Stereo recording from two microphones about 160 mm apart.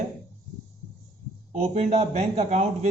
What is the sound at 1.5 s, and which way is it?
Speech, 40° right (ahead or behind).